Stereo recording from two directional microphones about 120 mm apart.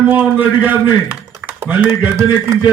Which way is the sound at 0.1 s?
15° right (ahead or behind).